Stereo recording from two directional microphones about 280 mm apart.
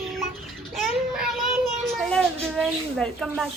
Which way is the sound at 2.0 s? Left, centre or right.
Centre.